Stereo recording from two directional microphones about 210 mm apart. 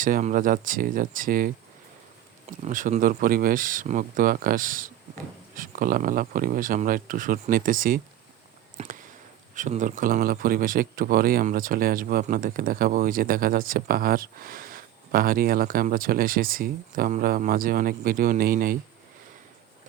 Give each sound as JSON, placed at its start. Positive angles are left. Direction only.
{"t": 0.0, "sound": "speech", "side_deg": -40}
{"t": 2.6, "sound": "speech", "side_deg": -35}
{"t": 8.8, "sound": "speech", "side_deg": -30}